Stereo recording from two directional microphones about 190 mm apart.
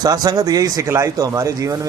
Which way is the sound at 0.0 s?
20° right (ahead or behind).